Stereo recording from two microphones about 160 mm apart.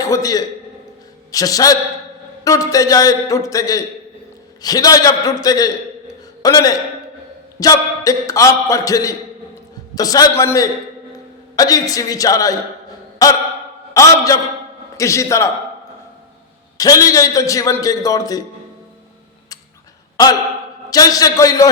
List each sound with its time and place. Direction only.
0.0 s a man's voice: 20° left (ahead or behind)
16.7 s a man's voice: 20° left (ahead or behind)
20.2 s a man's voice: 25° left (ahead or behind)